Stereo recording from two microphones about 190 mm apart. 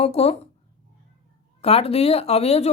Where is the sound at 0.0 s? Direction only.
35° left (ahead or behind).